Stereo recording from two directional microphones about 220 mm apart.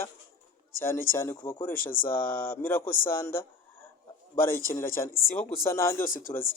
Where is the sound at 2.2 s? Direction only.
40° left (ahead or behind).